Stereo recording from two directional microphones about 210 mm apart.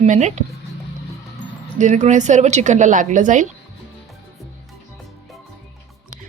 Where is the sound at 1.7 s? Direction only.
35° right (ahead or behind).